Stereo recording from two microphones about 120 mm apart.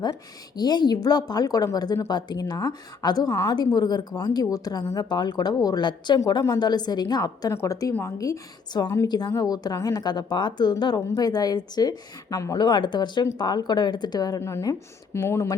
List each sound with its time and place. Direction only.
0.0 s a woman's voice: 35° left (ahead or behind)
12.5 s speech: 40° left (ahead or behind); by 15.5 s 25° left (ahead or behind)